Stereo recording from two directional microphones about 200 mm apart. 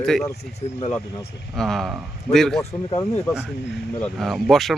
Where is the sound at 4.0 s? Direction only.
Centre (ahead or behind).